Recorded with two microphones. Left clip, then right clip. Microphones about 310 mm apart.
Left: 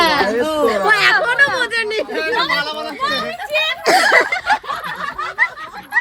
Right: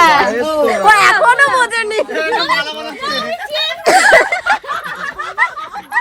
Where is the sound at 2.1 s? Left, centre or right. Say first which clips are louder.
Right 2 dB; left.